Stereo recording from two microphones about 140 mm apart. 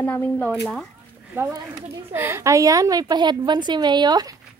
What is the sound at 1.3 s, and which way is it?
A woman's voice, 15° right (ahead or behind).